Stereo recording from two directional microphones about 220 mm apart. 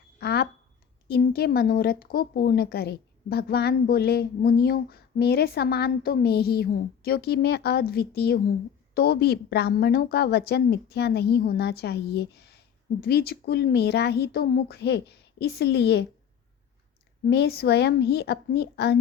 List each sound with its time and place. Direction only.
0.2 s a sound: 45° left (ahead or behind)
1.0 s speech: 45° left (ahead or behind)
17.2 s speech: 50° left (ahead or behind)